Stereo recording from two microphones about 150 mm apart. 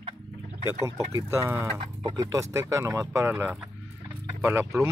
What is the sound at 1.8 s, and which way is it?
Speech, 35° right (ahead or behind).